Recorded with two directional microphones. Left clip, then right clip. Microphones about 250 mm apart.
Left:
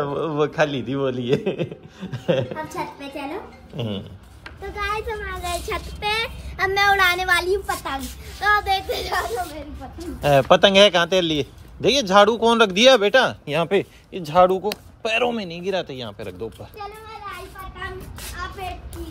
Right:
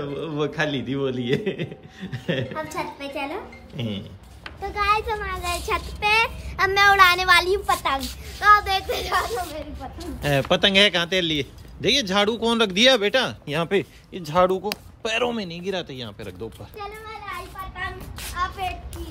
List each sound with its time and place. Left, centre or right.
0.0 s a child's voice: centre
16.7 s children playing: right
18.3 s a sound: centre